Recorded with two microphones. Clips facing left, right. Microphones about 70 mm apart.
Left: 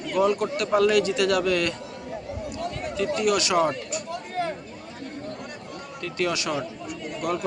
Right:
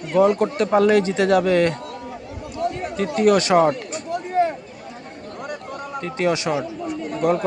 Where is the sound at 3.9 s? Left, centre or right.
Right.